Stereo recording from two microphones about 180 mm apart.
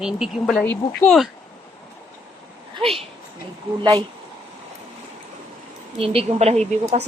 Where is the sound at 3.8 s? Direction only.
25° right (ahead or behind).